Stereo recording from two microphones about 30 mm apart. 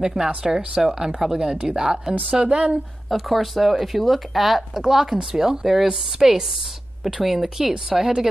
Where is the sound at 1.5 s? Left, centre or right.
Right.